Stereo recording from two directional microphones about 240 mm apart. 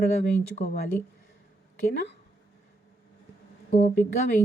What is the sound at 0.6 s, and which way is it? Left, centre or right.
Speech, left.